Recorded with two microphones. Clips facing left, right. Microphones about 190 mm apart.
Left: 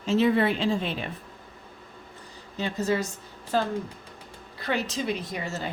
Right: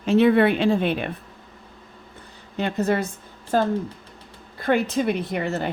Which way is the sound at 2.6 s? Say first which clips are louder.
Right 4 dB; 60° right (ahead or behind).